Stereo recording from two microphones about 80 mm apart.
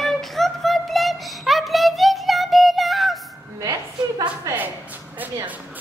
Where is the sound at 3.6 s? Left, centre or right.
Right.